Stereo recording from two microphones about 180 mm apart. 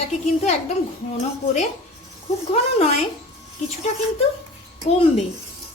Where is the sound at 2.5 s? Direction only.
35° left (ahead or behind).